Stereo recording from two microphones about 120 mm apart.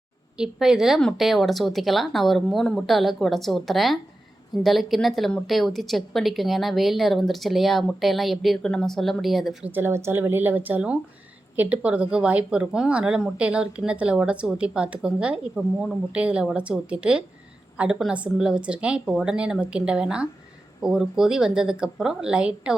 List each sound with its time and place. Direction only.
0.3 s a woman's voice: 5° right (ahead or behind)
9.6 s a woman's voice: 15° right (ahead or behind)